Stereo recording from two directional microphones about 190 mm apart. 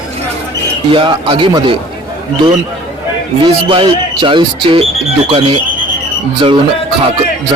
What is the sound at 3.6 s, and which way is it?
A man's voice, 25° right (ahead or behind).